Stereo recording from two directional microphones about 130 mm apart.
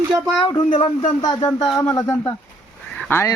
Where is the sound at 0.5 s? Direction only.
40° left (ahead or behind); by 3.3 s 20° left (ahead or behind).